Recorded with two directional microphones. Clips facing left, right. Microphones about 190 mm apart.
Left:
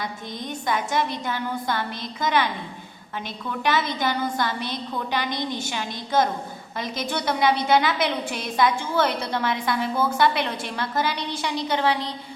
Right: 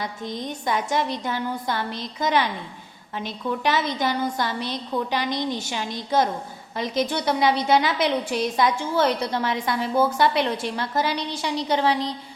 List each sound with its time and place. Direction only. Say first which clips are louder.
0.4 s a woman's voice: even; 35° right (ahead or behind)
3.6 s a woman's voice: left 1 dB; 35° right (ahead or behind)